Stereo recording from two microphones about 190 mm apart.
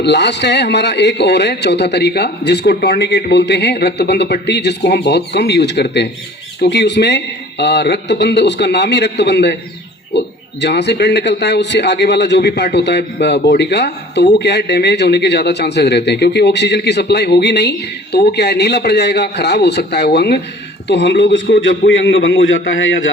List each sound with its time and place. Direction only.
0.0 s a man's voice: 65° left (ahead or behind); by 23.0 s 90° left